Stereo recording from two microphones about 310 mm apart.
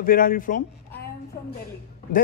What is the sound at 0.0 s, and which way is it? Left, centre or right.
A woman's voice, left.